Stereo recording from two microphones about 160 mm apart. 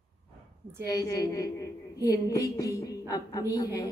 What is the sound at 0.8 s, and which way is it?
A woman's voice, 25° left (ahead or behind).